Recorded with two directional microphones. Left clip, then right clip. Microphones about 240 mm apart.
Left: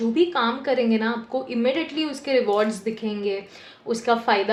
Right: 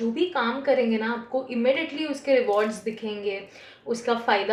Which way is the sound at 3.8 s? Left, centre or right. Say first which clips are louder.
Left 3 dB; left.